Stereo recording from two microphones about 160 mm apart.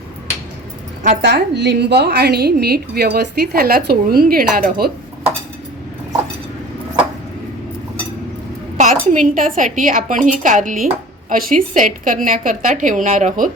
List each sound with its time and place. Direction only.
1.2 s a woman's voice: 90° right; by 4.9 s 65° right (ahead or behind)
8.8 s a woman's voice: 50° right (ahead or behind)